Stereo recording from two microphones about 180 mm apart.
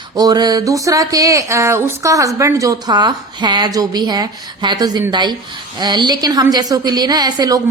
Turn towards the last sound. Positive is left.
turn(degrees=-20)  # may be behind; listen again after turning